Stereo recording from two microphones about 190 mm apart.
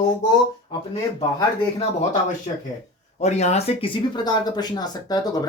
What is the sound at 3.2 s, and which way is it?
Speech, 35° left (ahead or behind).